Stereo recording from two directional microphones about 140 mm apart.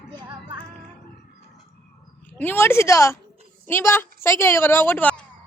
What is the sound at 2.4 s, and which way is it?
A woman's voice, 15° left (ahead or behind).